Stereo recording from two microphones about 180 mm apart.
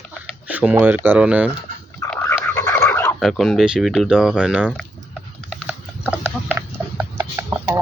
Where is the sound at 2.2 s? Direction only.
15° left (ahead or behind).